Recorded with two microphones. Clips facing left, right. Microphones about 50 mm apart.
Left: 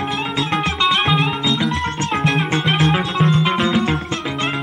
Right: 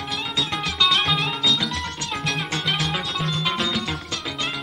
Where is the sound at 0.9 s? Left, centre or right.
Centre.